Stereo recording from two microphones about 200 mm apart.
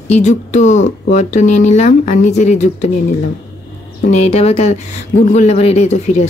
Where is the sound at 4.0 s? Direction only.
35° left (ahead or behind).